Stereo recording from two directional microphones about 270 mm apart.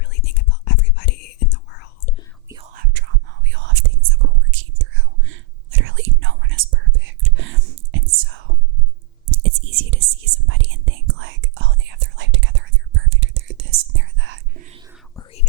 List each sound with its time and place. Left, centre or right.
0.0 s whispering: left
2.7 s whispering: right
15.1 s whispering: left